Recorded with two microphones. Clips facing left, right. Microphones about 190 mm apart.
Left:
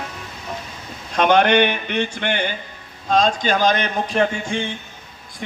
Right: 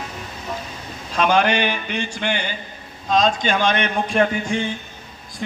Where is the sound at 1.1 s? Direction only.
60° left (ahead or behind).